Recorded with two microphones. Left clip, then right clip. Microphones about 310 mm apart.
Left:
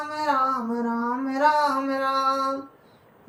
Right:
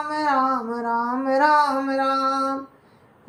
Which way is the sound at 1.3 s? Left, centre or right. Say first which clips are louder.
Right 3 dB; centre.